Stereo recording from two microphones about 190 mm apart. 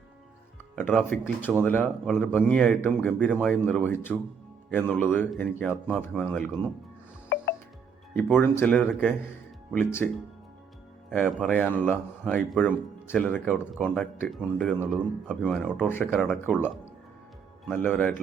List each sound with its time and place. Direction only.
0.8 s a man's voice: 10° left (ahead or behind)
7.3 s music: 65° left (ahead or behind)
8.1 s speech: 10° left (ahead or behind)
11.4 s speech: 5° left (ahead or behind)
17.7 s speech: 10° left (ahead or behind)